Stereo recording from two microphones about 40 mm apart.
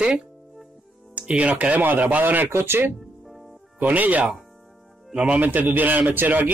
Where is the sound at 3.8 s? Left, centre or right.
Right.